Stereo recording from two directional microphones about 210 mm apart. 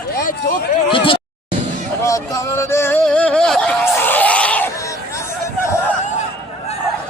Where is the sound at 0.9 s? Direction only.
25° left (ahead or behind).